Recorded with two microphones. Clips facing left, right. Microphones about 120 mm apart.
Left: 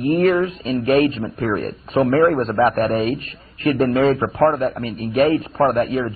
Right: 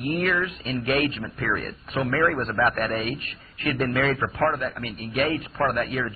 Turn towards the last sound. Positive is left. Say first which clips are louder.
# left 7 dB
turn(degrees=30)  # may be behind; listen again after turning